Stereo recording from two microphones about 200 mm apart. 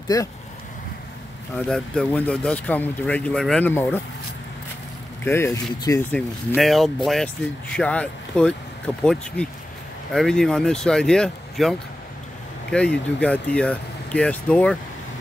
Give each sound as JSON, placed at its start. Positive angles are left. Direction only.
{"t": 0.1, "sound": "speech", "side_deg": 20}
{"t": 1.5, "sound": "speech", "side_deg": 5}
{"t": 5.2, "sound": "speech", "side_deg": 10}
{"t": 6.5, "sound": "speech", "side_deg": 0}
{"t": 12.7, "sound": "speech", "side_deg": 5}